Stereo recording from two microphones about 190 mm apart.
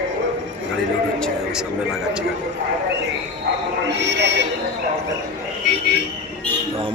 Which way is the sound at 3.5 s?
65° right (ahead or behind).